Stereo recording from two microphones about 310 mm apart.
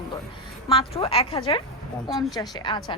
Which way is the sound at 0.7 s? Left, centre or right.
Centre.